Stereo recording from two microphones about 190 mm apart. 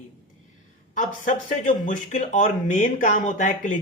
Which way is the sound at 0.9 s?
40° left (ahead or behind).